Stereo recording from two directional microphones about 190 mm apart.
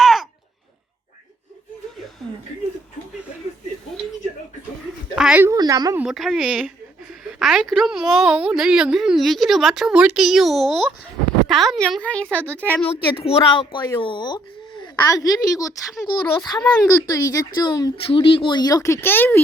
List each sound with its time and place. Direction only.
0.0 s a sound: centre (ahead or behind)
5.1 s speech: 5° right (ahead or behind)
5.5 s a woman's voice: 20° right (ahead or behind)
6.0 s a woman's voice: centre (ahead or behind)
12.8 s speech: 30° left (ahead or behind); by 19.4 s 10° left (ahead or behind)